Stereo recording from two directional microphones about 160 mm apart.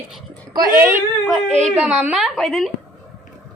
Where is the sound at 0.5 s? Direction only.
20° right (ahead or behind).